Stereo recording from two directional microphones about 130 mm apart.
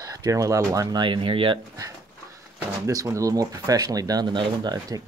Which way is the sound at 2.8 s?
25° right (ahead or behind).